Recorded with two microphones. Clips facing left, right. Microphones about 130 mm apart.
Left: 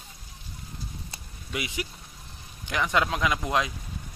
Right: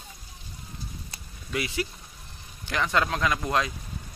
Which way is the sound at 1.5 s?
15° left (ahead or behind).